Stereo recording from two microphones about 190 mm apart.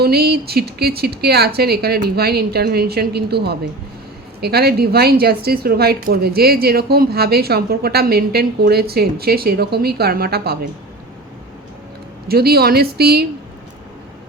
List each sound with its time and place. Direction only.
0.0 s a woman's voice: 55° right (ahead or behind)
12.3 s a woman's voice: 55° right (ahead or behind)